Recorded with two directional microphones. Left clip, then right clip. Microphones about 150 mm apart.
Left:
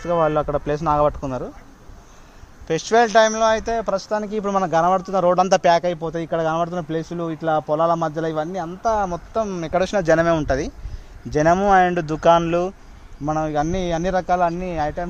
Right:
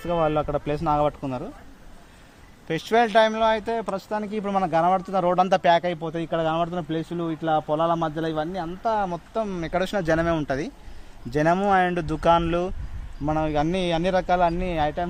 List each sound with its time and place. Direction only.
0.0 s speech: 40° left (ahead or behind)
2.6 s speech: 45° left (ahead or behind)
11.3 s speech: 40° left (ahead or behind)
13.2 s a man's voice: 25° left (ahead or behind)